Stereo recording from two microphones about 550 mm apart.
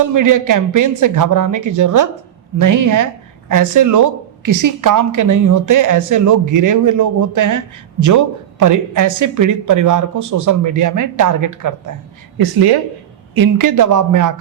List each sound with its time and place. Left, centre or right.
0.0 s a woman's voice: right
12.4 s a woman's voice: right